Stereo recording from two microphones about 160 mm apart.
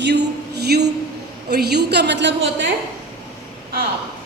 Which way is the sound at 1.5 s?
90° right.